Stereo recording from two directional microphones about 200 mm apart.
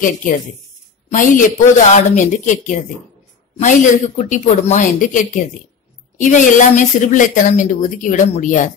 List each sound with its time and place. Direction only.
1.1 s a woman's voice: 40° left (ahead or behind)